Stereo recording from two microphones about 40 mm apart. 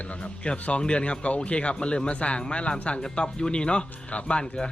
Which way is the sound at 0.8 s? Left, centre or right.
Left.